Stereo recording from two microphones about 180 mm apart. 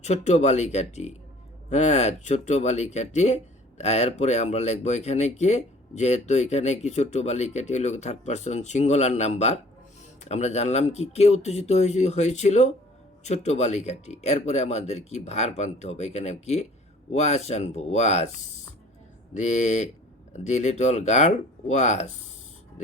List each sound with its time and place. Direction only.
0.0 s speech: 40° left (ahead or behind)
19.3 s speech: 40° left (ahead or behind)